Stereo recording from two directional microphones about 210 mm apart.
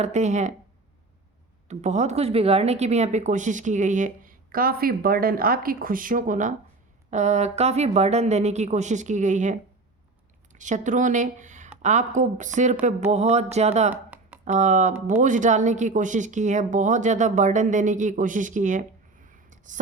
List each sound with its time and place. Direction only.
0.0 s speech: 35° right (ahead or behind)
1.6 s speech: 35° right (ahead or behind)
13.9 s a sound: 10° right (ahead or behind)
14.4 s speech: 35° right (ahead or behind)